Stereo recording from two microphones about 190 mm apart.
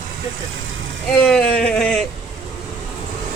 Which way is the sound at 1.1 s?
5° left (ahead or behind).